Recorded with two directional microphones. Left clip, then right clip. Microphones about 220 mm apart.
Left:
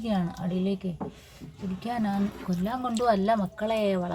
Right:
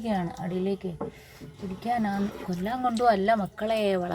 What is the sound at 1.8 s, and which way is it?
Speech, 15° left (ahead or behind).